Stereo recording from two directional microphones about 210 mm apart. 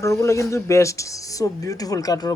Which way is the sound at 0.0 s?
15° left (ahead or behind).